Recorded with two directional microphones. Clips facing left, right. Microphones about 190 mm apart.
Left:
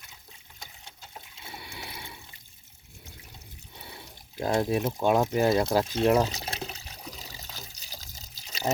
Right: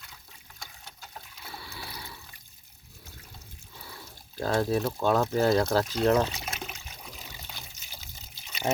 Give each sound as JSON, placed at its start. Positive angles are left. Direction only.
{"t": 1.0, "sound": "water", "side_deg": 20}
{"t": 3.8, "sound": "speech", "side_deg": 25}
{"t": 5.8, "sound": "speech", "side_deg": 25}
{"t": 6.1, "sound": "water", "side_deg": 35}